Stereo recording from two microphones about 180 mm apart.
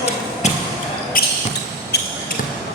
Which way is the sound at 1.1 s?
55° left (ahead or behind).